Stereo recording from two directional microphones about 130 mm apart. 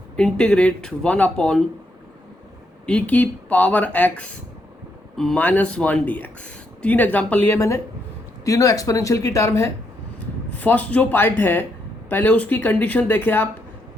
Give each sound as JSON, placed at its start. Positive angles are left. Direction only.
{"t": 0.2, "sound": "speech", "side_deg": 10}
{"t": 2.8, "sound": "speech", "side_deg": 10}
{"t": 5.4, "sound": "speech", "side_deg": 10}
{"t": 10.6, "sound": "speech", "side_deg": 10}